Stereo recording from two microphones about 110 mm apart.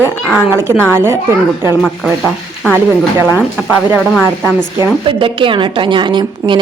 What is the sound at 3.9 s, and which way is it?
Speech, 5° left (ahead or behind).